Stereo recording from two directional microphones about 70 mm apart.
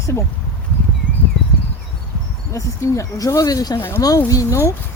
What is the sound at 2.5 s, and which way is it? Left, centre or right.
Speech, left.